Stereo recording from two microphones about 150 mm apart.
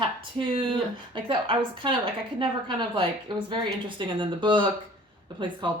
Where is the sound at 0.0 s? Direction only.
35° right (ahead or behind).